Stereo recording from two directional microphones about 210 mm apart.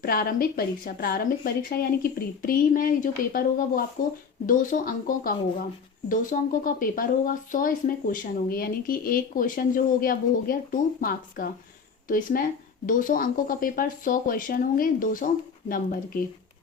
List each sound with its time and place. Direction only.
0.0 s speech: 45° left (ahead or behind)